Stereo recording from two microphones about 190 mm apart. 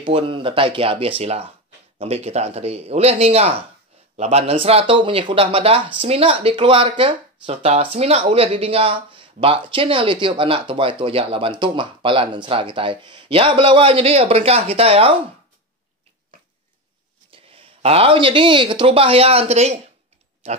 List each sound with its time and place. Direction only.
0.0 s speech: 25° right (ahead or behind)
17.3 s speech: 30° right (ahead or behind)